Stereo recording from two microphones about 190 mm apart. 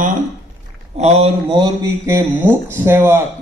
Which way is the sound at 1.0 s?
35° right (ahead or behind).